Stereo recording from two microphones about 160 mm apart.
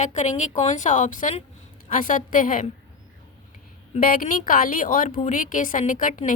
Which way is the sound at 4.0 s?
60° left (ahead or behind).